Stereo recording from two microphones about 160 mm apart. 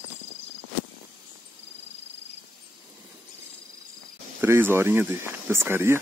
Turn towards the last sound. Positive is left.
turn(degrees=-15)  # may be behind; listen again after turning